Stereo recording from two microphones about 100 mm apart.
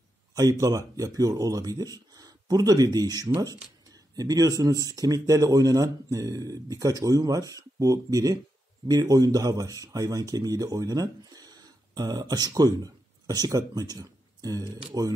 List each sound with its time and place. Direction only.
0.3 s speech: 35° right (ahead or behind)